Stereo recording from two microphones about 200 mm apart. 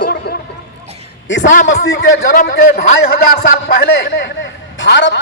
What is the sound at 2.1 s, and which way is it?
Speech, 40° left (ahead or behind).